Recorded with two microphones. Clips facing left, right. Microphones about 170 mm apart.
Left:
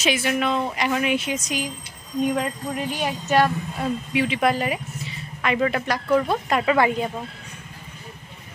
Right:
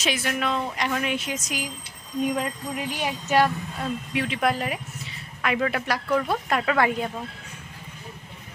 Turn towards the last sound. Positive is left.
turn(degrees=5)  # may be behind; listen again after turning